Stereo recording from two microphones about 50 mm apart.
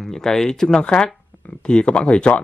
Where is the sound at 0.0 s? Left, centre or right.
Centre.